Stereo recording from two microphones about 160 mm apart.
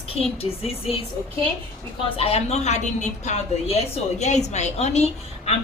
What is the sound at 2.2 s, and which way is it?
A woman's voice, 40° left (ahead or behind).